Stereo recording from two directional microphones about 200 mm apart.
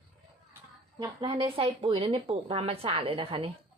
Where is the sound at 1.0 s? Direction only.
25° right (ahead or behind).